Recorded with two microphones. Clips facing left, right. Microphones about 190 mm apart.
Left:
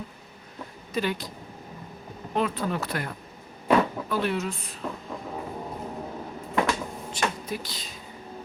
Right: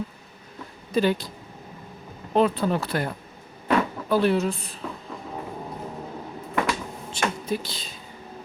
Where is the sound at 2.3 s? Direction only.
30° right (ahead or behind).